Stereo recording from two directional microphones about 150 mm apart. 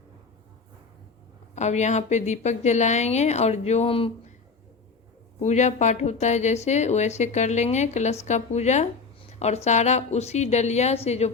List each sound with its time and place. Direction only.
1.5 s a woman's voice: 50° left (ahead or behind)
5.4 s a woman's voice: 50° left (ahead or behind)